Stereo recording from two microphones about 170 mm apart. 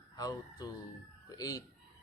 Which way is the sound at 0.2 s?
20° left (ahead or behind).